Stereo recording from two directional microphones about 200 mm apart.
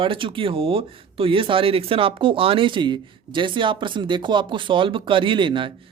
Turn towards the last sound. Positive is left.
turn(degrees=-25)  # may be behind; listen again after turning